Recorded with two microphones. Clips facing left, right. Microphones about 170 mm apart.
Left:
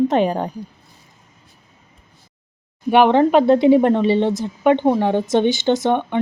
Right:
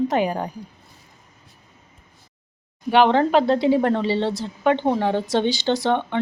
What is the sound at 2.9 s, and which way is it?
Speech, 20° left (ahead or behind).